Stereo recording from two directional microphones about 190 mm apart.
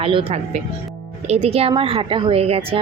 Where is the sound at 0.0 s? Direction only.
30° right (ahead or behind).